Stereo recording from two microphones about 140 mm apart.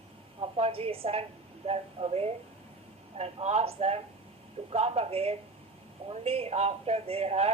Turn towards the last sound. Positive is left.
turn(degrees=-50)  # may be behind; listen again after turning